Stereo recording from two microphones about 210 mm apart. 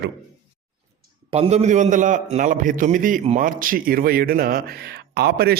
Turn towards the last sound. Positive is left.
turn(degrees=-50)  # may be behind; listen again after turning